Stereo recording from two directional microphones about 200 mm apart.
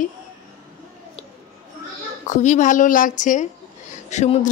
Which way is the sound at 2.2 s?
35° left (ahead or behind).